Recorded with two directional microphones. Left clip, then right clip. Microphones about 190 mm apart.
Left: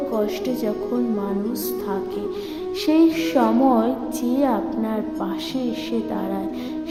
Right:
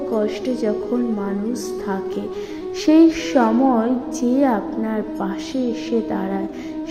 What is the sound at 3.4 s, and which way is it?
A woman's voice, 5° right (ahead or behind).